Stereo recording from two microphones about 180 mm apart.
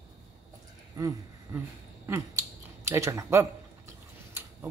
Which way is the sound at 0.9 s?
15° right (ahead or behind).